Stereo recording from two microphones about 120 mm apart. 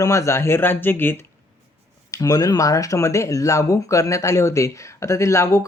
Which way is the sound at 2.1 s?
30° left (ahead or behind).